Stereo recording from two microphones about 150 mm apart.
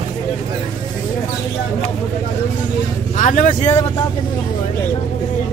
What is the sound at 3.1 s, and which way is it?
Speech, 55° left (ahead or behind).